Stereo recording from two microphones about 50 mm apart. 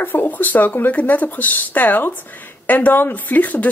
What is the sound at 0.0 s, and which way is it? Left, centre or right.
Speech, left.